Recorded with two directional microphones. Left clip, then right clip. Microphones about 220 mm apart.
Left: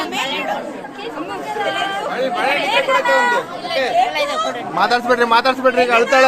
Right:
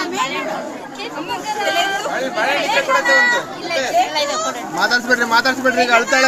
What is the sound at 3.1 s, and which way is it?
Speech, 25° left (ahead or behind).